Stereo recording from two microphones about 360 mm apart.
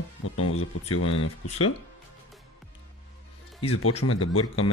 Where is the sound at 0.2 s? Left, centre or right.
Left.